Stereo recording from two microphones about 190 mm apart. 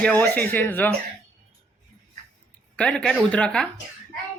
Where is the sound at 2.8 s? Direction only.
5° left (ahead or behind).